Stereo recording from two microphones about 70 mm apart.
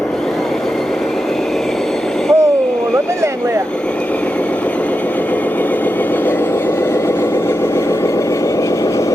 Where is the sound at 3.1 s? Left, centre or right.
Right.